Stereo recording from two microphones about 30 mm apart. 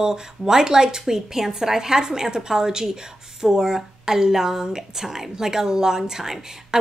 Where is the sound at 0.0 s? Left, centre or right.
Centre.